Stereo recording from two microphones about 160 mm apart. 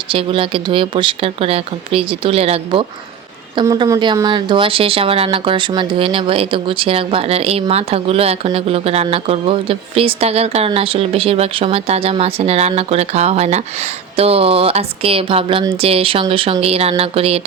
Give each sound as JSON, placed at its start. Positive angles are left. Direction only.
{"t": 0.1, "sound": "a woman's voice", "side_deg": -35}